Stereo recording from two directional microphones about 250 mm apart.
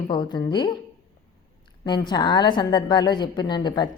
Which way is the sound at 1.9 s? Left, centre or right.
Centre.